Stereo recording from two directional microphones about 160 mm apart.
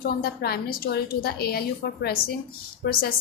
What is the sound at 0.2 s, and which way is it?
A woman's voice, 80° left.